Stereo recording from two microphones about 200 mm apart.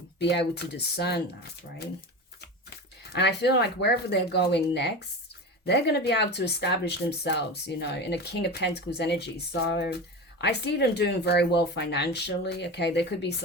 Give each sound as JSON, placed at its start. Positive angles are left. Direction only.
{"t": 0.2, "sound": "speech", "side_deg": 55}
{"t": 2.6, "sound": "speech", "side_deg": 55}